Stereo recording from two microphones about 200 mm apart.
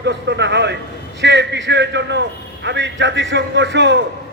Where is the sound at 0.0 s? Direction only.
60° right (ahead or behind).